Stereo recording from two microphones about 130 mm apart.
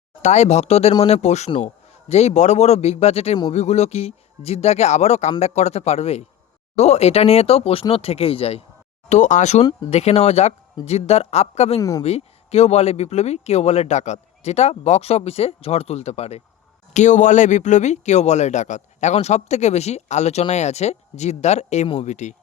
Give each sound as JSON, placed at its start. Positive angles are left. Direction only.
{"t": 0.2, "sound": "a man's voice", "side_deg": 60}
{"t": 9.0, "sound": "speech", "side_deg": 65}
{"t": 11.8, "sound": "speech", "side_deg": 25}
{"t": 12.0, "sound": "speech", "side_deg": 55}
{"t": 16.9, "sound": "speech", "side_deg": 70}